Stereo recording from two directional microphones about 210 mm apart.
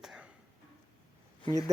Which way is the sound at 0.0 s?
5° right (ahead or behind).